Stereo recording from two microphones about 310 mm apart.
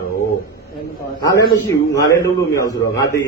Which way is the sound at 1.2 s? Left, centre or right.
Centre.